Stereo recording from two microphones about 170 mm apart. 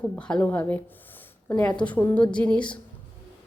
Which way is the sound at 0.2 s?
5° left (ahead or behind).